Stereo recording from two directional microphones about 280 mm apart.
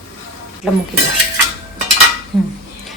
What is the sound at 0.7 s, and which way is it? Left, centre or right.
Speech, centre.